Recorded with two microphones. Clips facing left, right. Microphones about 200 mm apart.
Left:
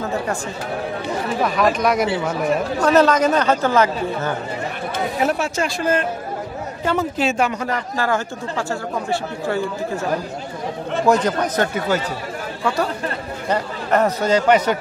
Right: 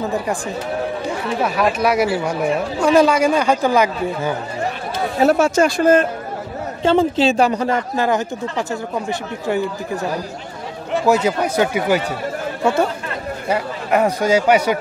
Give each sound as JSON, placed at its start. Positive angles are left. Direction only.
{"t": 1.4, "sound": "speech", "side_deg": -5}
{"t": 5.2, "sound": "speech", "side_deg": -40}
{"t": 6.8, "sound": "speech", "side_deg": -30}
{"t": 11.1, "sound": "speech", "side_deg": -10}
{"t": 13.5, "sound": "speech", "side_deg": -10}